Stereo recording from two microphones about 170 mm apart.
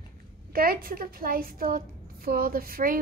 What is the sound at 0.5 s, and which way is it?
A woman's voice, 60° right (ahead or behind).